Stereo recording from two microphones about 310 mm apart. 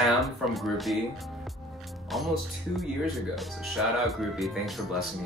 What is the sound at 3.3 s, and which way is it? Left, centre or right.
Speech, centre.